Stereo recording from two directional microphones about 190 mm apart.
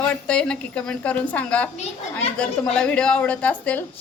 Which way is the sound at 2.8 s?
5° left (ahead or behind).